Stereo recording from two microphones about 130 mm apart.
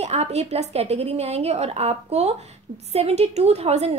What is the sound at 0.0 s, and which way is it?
A woman's voice, 55° right (ahead or behind).